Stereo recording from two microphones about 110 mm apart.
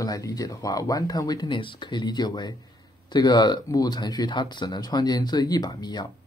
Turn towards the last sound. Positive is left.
turn(degrees=40)  # may be behind; listen again after turning